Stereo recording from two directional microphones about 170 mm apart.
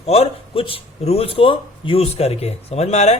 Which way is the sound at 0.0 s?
35° left (ahead or behind).